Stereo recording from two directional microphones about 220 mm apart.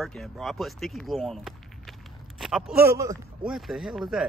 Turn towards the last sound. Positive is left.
turn(degrees=0)  # may be behind; listen again after turning